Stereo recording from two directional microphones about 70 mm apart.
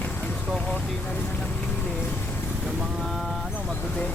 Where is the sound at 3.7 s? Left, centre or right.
Centre.